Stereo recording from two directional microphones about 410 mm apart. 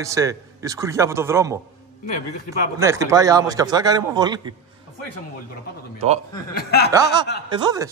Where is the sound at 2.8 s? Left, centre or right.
Centre.